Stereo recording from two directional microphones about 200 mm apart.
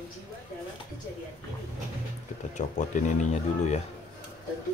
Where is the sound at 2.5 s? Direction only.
40° left (ahead or behind).